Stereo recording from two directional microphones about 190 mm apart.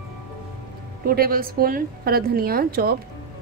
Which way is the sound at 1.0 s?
50° right (ahead or behind).